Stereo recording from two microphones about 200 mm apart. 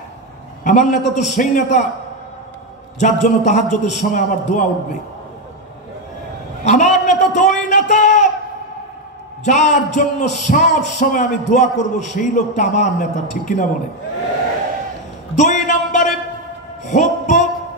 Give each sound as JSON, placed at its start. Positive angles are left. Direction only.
{"t": 0.7, "sound": "a man's voice", "side_deg": 35}
{"t": 3.0, "sound": "a man's voice", "side_deg": 35}
{"t": 6.6, "sound": "a man's voice", "side_deg": 35}
{"t": 9.4, "sound": "a man's voice", "side_deg": 35}
{"t": 15.3, "sound": "a sound", "side_deg": 40}
{"t": 16.8, "sound": "music", "side_deg": 40}